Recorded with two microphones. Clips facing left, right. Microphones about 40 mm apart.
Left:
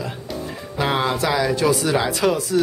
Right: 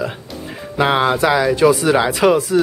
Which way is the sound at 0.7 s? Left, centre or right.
Right.